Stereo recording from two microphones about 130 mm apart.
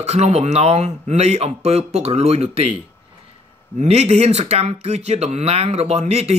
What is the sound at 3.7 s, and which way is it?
Speech, 60° right (ahead or behind).